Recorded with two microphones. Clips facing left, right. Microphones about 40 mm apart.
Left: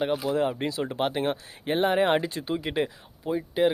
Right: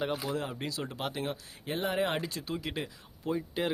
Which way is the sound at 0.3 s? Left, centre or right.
Left.